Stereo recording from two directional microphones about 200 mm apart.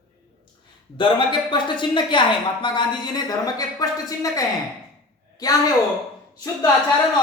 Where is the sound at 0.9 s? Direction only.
25° left (ahead or behind).